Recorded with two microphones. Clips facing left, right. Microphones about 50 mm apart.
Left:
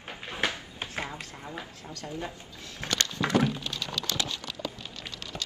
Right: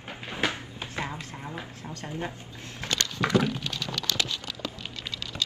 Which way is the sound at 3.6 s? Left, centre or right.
Right.